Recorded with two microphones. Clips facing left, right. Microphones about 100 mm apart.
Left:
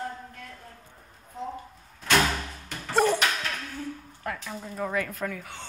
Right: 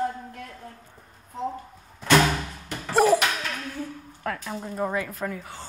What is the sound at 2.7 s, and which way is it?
Music, 5° right (ahead or behind).